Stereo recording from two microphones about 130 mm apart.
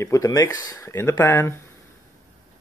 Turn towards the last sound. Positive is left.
turn(degrees=20)  # may be behind; listen again after turning